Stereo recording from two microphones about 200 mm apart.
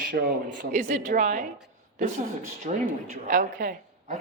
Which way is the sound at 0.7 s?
40° right (ahead or behind).